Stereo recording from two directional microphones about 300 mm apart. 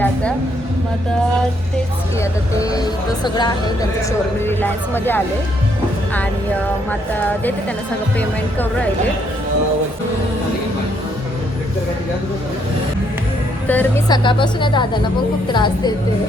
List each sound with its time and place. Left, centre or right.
0.0 s a sound: centre
2.6 s a woman's voice: centre
7.1 s a woman's voice: centre
13.7 s a woman's voice: centre